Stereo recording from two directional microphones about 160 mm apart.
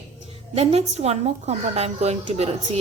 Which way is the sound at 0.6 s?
40° right (ahead or behind).